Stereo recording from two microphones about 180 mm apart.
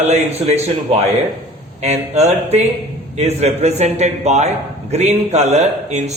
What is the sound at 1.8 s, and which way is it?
A man's voice, 35° right (ahead or behind).